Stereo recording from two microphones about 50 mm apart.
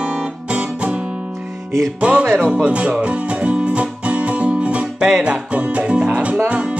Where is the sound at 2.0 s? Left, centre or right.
Right.